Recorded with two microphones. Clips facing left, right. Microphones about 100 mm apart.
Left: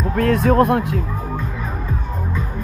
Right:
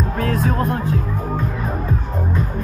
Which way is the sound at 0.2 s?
60° left (ahead or behind).